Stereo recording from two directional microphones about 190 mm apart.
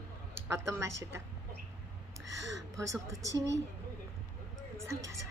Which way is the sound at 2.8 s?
15° right (ahead or behind).